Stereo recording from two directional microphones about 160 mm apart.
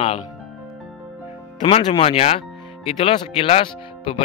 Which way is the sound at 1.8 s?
35° left (ahead or behind).